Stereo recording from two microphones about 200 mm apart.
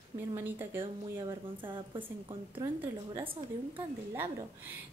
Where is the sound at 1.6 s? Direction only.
25° right (ahead or behind).